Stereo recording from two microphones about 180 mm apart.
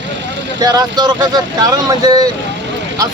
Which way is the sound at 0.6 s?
20° right (ahead or behind).